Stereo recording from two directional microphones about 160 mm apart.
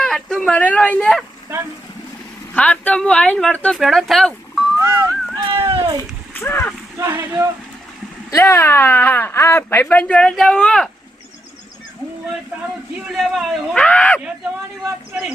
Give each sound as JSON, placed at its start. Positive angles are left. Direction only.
{"t": 0.0, "sound": "speech", "side_deg": 5}
{"t": 2.6, "sound": "speech", "side_deg": 10}
{"t": 4.8, "sound": "speech", "side_deg": -20}
{"t": 5.5, "sound": "cat", "side_deg": -35}
{"t": 6.3, "sound": "speech", "side_deg": 15}
{"t": 7.0, "sound": "speech", "side_deg": -15}
{"t": 8.3, "sound": "speech", "side_deg": 20}
{"t": 13.1, "sound": "speech", "side_deg": 0}